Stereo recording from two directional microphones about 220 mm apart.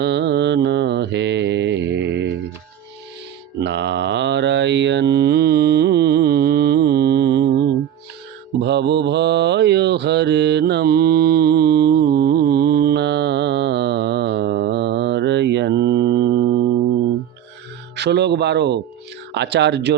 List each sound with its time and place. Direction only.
0.0 s mantra: 50° right (ahead or behind)
3.6 s mantra: 50° right (ahead or behind)
17.9 s speech: 50° right (ahead or behind)